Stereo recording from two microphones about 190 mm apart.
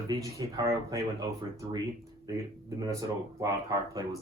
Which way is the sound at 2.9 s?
20° right (ahead or behind).